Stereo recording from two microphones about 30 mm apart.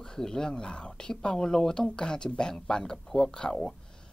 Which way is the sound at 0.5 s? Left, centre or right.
Left.